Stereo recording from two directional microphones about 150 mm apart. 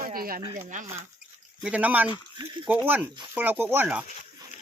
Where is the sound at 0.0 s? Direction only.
75° right (ahead or behind).